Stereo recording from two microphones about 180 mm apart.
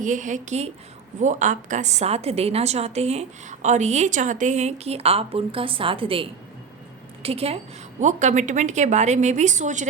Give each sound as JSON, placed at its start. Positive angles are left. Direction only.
{"t": 0.0, "sound": "a woman's voice", "side_deg": -45}